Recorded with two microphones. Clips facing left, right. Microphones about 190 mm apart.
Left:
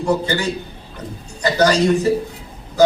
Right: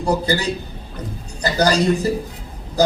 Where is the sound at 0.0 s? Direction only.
35° right (ahead or behind).